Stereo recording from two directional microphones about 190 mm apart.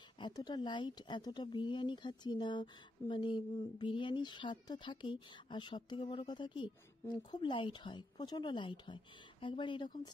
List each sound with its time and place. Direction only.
0.2 s speech: 20° left (ahead or behind)